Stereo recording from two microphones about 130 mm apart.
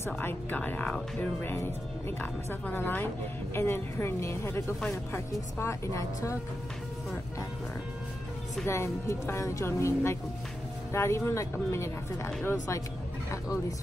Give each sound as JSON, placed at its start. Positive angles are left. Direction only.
{"t": 0.0, "sound": "speech", "side_deg": 15}
{"t": 8.6, "sound": "speech", "side_deg": 20}